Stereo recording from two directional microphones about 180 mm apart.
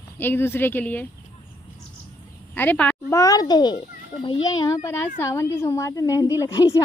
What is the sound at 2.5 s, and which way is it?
A woman's voice, 10° left (ahead or behind).